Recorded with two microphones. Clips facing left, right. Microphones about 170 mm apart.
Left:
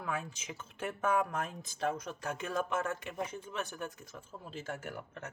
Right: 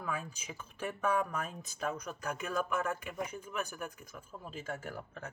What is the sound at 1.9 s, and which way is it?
Speech, 25° left (ahead or behind).